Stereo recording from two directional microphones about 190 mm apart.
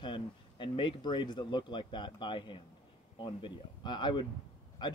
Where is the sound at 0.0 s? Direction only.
25° left (ahead or behind).